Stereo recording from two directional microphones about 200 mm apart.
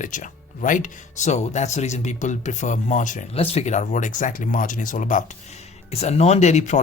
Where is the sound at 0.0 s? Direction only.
40° left (ahead or behind).